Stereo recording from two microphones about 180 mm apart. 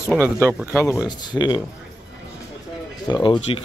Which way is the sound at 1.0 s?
25° left (ahead or behind).